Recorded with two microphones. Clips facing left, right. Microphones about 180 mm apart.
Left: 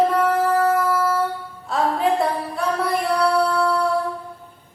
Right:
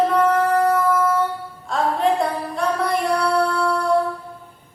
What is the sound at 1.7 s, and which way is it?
Music, 5° left (ahead or behind).